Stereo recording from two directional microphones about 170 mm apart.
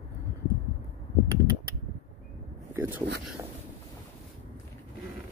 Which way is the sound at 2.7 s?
15° right (ahead or behind).